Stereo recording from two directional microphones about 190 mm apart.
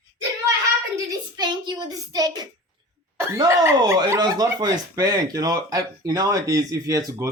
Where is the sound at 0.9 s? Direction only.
20° right (ahead or behind).